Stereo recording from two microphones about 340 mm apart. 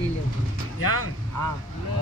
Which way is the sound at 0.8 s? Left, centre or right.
Right.